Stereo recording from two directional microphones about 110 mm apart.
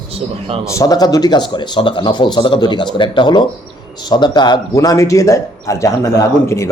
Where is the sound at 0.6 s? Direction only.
30° left (ahead or behind).